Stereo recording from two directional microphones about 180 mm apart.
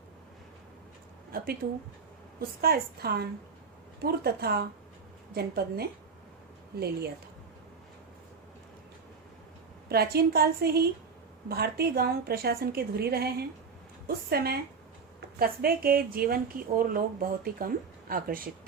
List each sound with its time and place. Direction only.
2.6 s a woman's voice: 60° right (ahead or behind)
9.9 s a woman's voice: 60° right (ahead or behind)